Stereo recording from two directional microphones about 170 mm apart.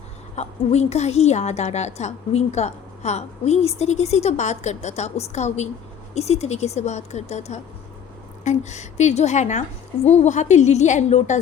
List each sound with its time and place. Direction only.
0.3 s a woman's voice: 40° left (ahead or behind)